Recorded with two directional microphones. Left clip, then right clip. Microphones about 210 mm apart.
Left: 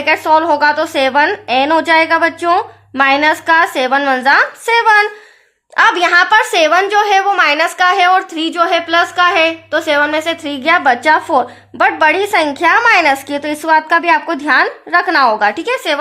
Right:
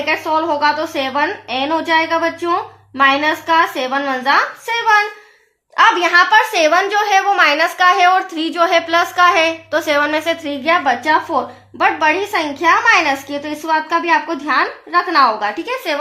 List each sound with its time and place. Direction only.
0.0 s a woman's voice: 50° left (ahead or behind)